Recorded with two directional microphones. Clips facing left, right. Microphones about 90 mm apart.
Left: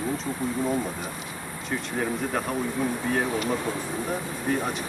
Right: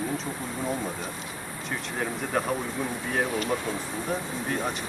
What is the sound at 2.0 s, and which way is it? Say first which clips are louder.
Speech: even; centre (ahead or behind).